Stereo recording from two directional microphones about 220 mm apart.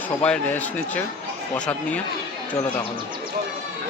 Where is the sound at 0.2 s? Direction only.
5° left (ahead or behind).